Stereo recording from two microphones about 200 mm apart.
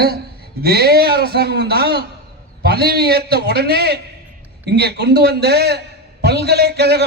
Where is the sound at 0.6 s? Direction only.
50° right (ahead or behind).